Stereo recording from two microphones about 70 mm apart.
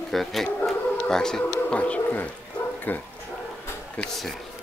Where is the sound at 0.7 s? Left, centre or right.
Centre.